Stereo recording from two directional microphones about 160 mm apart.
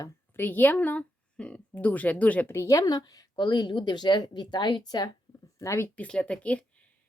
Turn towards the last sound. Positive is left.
turn(degrees=5)  # may be behind; listen again after turning